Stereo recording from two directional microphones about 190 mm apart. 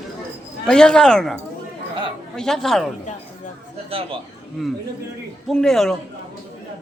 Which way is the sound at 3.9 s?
30° right (ahead or behind).